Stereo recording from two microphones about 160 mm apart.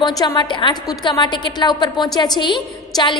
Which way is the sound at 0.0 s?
25° left (ahead or behind).